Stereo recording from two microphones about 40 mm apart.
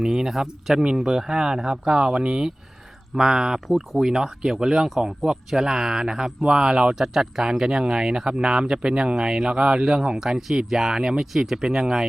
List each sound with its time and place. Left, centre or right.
0.0 s speech: centre
0.8 s speech: right
3.7 s speech: centre